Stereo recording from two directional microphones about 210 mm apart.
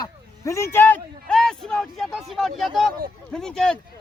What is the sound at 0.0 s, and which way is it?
Speech, 15° left (ahead or behind).